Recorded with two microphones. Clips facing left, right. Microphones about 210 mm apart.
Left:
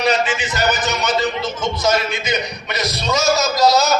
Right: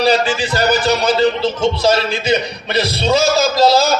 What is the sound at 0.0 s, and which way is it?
A man's voice, 30° right (ahead or behind).